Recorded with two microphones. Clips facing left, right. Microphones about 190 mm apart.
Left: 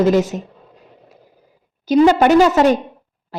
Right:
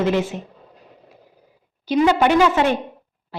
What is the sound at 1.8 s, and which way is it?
Speech, 45° left (ahead or behind).